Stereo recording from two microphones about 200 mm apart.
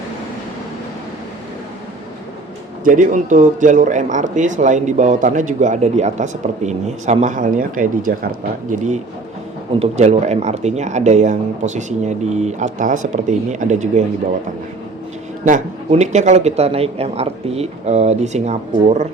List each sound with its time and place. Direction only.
2.8 s speech: 40° right (ahead or behind)
9.7 s speech: 30° right (ahead or behind)
15.4 s speech: 35° right (ahead or behind)